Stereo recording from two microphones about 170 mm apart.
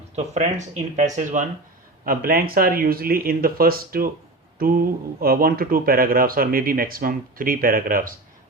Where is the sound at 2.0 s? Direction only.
55° right (ahead or behind).